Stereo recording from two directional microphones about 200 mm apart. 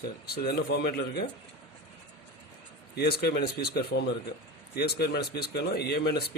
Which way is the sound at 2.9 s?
50° left (ahead or behind).